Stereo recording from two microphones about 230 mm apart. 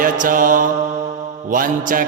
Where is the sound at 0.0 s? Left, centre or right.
Right.